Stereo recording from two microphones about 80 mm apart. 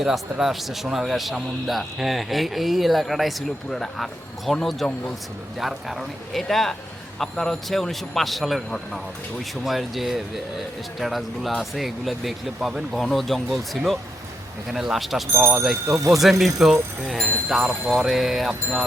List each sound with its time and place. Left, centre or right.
0.0 s a man's voice: centre
15.9 s speech: right
16.6 s a man's voice: centre